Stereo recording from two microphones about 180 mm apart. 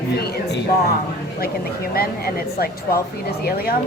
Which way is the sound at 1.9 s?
55° left (ahead or behind).